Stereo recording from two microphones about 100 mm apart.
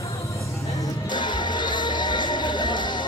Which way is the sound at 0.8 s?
50° left (ahead or behind).